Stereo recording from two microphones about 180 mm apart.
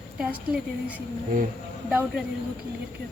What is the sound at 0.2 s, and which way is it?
A woman's voice, 5° right (ahead or behind).